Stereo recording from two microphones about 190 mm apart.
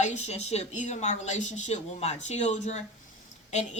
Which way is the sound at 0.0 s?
35° left (ahead or behind).